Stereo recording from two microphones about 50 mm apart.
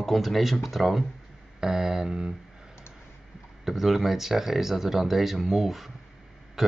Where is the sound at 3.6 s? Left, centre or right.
Centre.